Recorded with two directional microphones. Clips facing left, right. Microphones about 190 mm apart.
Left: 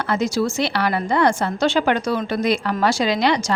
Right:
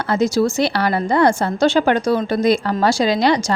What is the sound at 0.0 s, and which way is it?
A woman's voice, 40° right (ahead or behind).